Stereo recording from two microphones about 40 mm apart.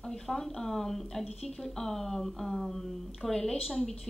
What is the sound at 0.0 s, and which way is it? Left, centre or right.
Speech, centre.